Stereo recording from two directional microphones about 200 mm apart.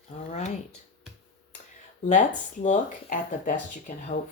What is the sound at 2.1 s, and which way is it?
Speech, 40° left (ahead or behind).